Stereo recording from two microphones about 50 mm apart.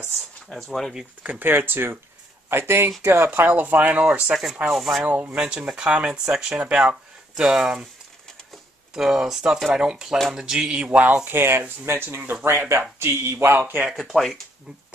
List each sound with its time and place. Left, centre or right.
0.5 s speech: centre
1.4 s speech: right
3.0 s speech: right
3.3 s speech: right
4.0 s speech: right
4.6 s speech: centre
5.0 s speech: right
5.6 s speech: centre
6.7 s a sound: centre
7.4 s speech: centre
8.9 s speech: centre; by 11.1 s right
11.2 s speech: right
13.9 s speech: centre